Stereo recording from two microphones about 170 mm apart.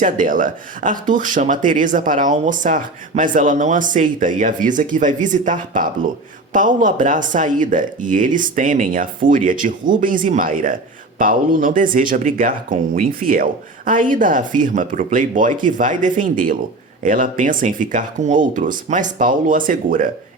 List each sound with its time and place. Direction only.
0.0 s speech: 50° right (ahead or behind)